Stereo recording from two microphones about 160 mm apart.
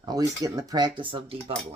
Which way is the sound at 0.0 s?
25° right (ahead or behind).